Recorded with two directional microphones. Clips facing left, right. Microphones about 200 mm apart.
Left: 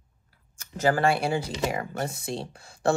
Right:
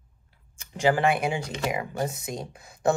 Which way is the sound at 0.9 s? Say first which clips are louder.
Left 2 dB; 15° right (ahead or behind).